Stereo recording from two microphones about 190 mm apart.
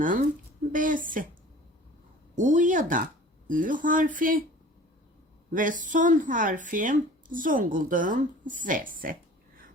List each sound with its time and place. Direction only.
0.7 s speech: 45° right (ahead or behind)
2.3 s speech: 40° right (ahead or behind)
5.5 s speech: 45° right (ahead or behind)